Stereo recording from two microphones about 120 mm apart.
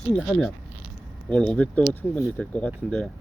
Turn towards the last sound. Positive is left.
turn(degrees=5)  # may be behind; listen again after turning